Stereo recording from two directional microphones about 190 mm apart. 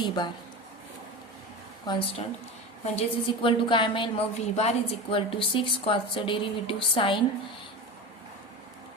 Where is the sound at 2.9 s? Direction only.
25° left (ahead or behind).